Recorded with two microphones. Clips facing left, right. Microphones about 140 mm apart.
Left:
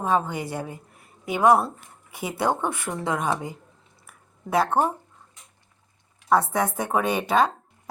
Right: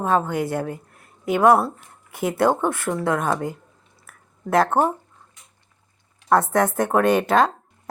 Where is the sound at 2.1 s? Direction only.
50° right (ahead or behind).